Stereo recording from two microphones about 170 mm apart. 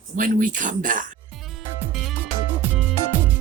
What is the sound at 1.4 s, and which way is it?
Music, centre (ahead or behind).